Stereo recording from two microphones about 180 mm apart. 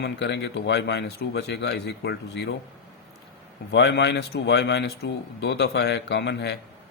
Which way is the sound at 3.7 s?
75° left (ahead or behind).